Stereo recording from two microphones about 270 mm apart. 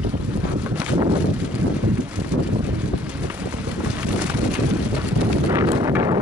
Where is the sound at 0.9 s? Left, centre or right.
Centre.